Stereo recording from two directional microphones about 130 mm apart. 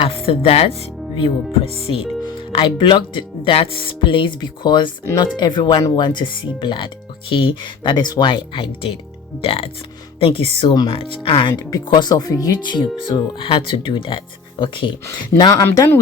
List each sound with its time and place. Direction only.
0.0 s speech: 45° left (ahead or behind)
15.6 s speech: 25° left (ahead or behind)